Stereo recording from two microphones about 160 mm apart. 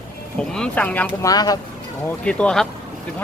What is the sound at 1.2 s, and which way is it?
Speech, 25° left (ahead or behind).